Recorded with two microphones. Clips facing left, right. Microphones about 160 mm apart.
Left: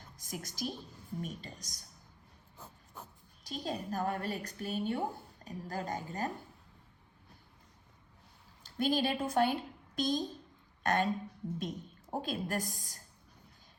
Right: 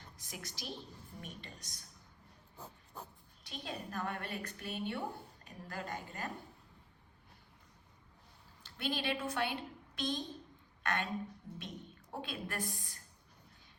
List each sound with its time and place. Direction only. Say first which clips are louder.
0.2 s a woman's voice: left 9 dB; 45° left (ahead or behind)
3.4 s a woman's voice: left 6 dB; 40° left (ahead or behind)
8.6 s a woman's voice: left 7 dB; 40° left (ahead or behind)
12.2 s a woman's voice: left 4 dB; 40° left (ahead or behind)